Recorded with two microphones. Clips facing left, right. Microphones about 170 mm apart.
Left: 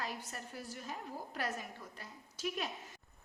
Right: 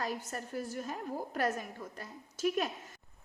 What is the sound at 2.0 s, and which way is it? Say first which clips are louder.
Speech: right 8 dB; 50° right (ahead or behind).